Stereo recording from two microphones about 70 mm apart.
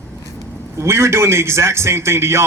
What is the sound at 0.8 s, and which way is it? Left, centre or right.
A man's voice, right.